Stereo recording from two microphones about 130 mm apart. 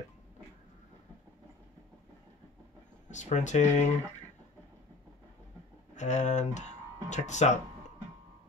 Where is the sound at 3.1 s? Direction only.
65° left (ahead or behind).